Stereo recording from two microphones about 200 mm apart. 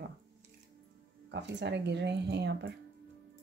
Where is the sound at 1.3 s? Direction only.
60° right (ahead or behind).